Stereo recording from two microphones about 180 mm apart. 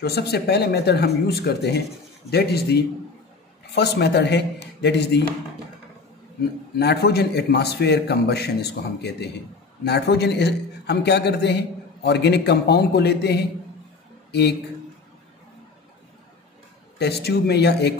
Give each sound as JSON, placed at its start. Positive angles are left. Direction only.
{"t": 0.0, "sound": "a man's voice", "side_deg": 65}
{"t": 6.8, "sound": "a man's voice", "side_deg": 65}
{"t": 17.0, "sound": "a man's voice", "side_deg": 65}